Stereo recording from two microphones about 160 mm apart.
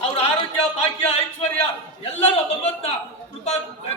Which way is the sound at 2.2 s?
45° left (ahead or behind).